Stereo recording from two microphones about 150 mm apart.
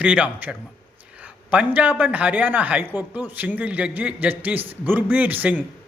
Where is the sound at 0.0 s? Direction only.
10° right (ahead or behind).